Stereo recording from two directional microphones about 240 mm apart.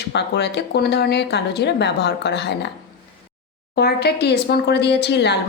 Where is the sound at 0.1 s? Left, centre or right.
Left.